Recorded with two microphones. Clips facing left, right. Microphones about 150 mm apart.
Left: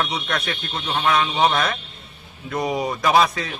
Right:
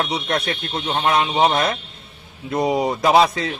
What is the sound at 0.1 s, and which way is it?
Speech, 25° right (ahead or behind).